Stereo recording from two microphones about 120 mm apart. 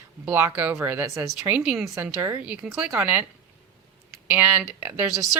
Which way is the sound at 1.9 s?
20° right (ahead or behind).